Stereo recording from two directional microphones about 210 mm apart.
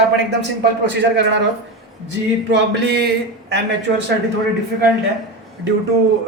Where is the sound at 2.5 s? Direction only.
55° right (ahead or behind).